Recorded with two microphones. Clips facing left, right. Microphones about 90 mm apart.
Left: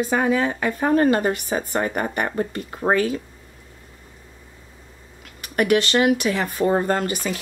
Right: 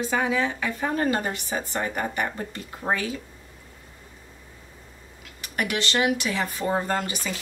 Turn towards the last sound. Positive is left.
turn(degrees=45)  # may be behind; listen again after turning